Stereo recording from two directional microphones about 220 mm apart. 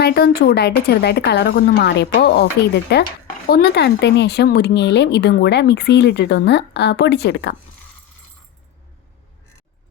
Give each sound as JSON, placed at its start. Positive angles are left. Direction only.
{"t": 0.0, "sound": "speech", "side_deg": 45}